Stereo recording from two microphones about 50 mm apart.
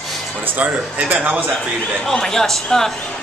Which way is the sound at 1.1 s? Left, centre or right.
Right.